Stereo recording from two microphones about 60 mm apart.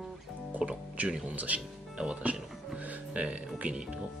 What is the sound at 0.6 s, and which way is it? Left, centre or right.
Speech, right.